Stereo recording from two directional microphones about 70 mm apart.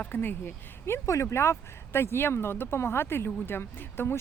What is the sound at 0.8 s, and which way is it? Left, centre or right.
Speech, left.